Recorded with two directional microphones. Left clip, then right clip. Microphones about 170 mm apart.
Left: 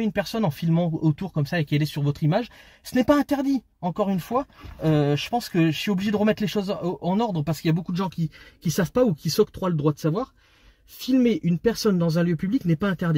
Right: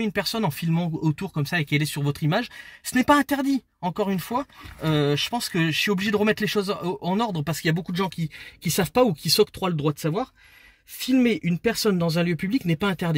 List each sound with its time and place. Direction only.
0.0 s speech: 20° right (ahead or behind)